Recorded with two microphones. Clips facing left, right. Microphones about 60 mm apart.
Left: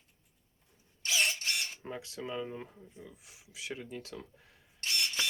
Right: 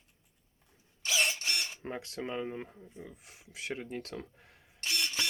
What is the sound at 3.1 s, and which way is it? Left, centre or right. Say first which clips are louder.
Speech: right 2 dB; right.